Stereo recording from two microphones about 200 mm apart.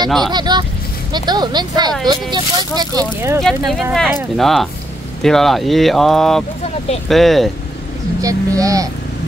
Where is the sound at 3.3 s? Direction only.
Centre (ahead or behind).